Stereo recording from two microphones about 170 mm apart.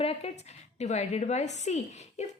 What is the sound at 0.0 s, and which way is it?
A woman's voice, 35° left (ahead or behind).